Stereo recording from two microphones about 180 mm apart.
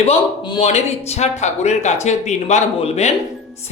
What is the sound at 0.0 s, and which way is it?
Speech, 30° left (ahead or behind).